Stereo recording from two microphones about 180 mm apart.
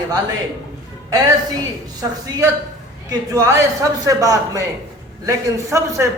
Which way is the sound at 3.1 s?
15° right (ahead or behind).